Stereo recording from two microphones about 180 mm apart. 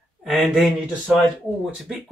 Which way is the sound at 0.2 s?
Centre (ahead or behind).